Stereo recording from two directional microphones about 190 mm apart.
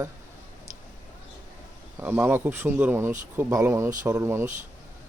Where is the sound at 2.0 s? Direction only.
10° right (ahead or behind).